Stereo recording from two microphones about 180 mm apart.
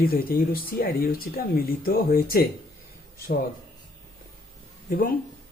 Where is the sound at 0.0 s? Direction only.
55° left (ahead or behind).